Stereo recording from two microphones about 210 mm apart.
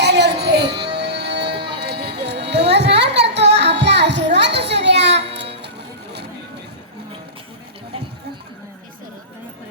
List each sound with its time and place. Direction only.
0.0 s music: 55° right (ahead or behind)